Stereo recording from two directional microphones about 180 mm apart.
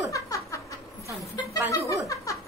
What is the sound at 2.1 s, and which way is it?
Music, 20° left (ahead or behind).